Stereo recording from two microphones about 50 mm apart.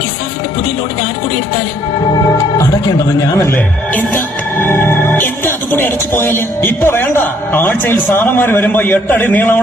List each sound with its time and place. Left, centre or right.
4.6 s speech: left